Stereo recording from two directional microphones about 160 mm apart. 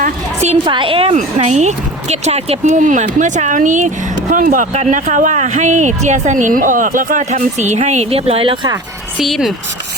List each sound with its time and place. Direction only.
0.0 s a woman's voice: 45° right (ahead or behind)
0.7 s a woman's voice: 30° right (ahead or behind)
9.1 s speech: centre (ahead or behind)